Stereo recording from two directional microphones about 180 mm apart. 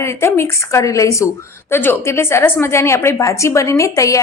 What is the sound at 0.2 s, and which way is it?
A woman's voice, 15° left (ahead or behind).